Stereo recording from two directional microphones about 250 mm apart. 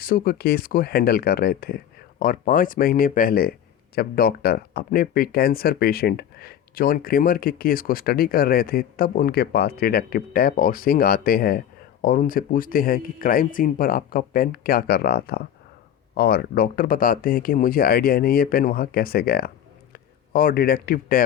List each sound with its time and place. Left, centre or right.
0.0 s speech: left